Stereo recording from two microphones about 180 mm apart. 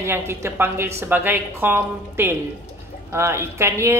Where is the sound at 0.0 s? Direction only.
15° right (ahead or behind).